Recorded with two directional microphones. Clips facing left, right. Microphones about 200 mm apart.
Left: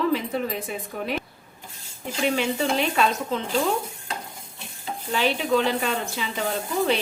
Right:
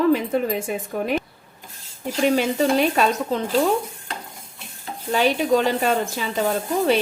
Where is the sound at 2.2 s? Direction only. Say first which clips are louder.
Right 5 dB; 40° right (ahead or behind).